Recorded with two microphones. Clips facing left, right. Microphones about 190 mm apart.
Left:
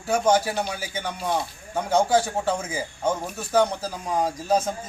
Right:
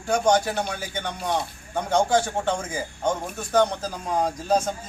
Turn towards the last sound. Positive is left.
turn(degrees=5)  # may be behind; listen again after turning